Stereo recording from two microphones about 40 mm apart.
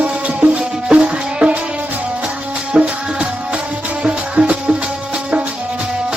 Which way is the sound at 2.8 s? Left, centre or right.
Right.